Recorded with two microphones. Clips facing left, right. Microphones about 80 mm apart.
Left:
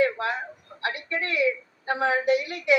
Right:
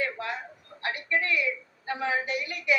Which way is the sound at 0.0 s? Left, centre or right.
Left.